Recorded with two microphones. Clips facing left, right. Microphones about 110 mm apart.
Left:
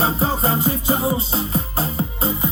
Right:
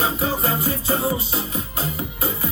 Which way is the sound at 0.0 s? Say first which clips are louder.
Left 2 dB; 30° left (ahead or behind).